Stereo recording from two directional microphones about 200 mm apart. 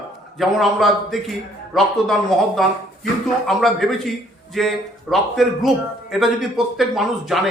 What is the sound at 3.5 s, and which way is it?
A man's voice, centre (ahead or behind).